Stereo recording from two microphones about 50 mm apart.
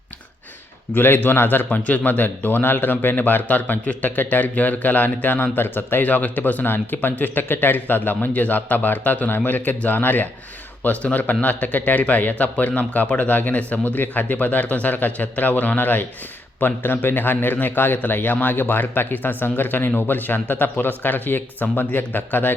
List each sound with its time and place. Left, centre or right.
0.9 s a man's voice: left